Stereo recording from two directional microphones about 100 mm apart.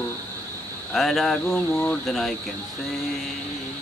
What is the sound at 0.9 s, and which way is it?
Speech, centre (ahead or behind).